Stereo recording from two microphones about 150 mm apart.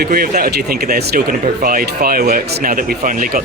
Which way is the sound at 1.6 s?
75° right (ahead or behind).